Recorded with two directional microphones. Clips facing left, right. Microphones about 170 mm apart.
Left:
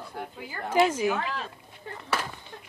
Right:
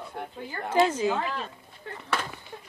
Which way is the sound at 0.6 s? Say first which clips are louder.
Even; 10° left (ahead or behind).